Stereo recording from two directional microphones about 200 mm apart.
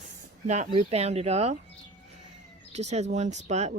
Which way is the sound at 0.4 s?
35° right (ahead or behind).